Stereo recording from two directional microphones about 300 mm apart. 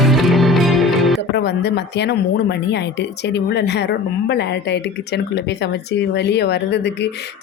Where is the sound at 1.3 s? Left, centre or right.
Left.